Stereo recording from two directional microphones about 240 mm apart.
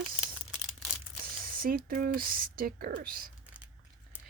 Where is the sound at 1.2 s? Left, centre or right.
Right.